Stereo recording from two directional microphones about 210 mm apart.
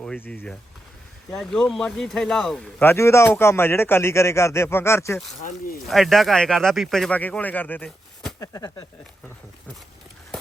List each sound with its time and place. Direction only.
0.0 s a man's voice: 5° left (ahead or behind)
5.4 s speech: 35° left (ahead or behind)
5.9 s speech: centre (ahead or behind)
8.4 s a man's voice: 15° left (ahead or behind)